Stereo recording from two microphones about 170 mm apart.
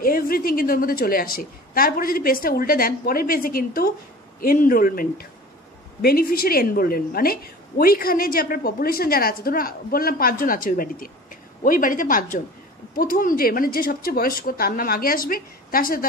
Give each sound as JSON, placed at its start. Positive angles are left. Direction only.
{"t": 0.0, "sound": "a woman's voice", "side_deg": 60}